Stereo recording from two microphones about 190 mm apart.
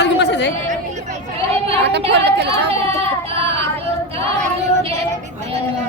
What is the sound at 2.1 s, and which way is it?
Speech, 65° right (ahead or behind).